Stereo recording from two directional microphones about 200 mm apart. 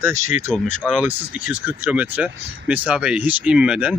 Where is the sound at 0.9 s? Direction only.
5° right (ahead or behind).